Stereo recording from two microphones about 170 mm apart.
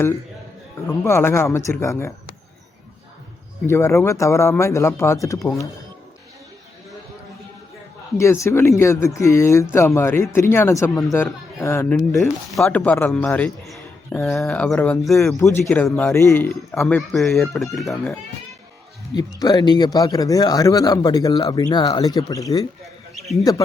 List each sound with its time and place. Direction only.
1.0 s speech: 15° left (ahead or behind)
3.7 s speech: 15° left (ahead or behind)
8.2 s speech: 15° left (ahead or behind)
11.9 s speech: centre (ahead or behind)
17.1 s speech: centre (ahead or behind)
19.1 s speech: 20° left (ahead or behind)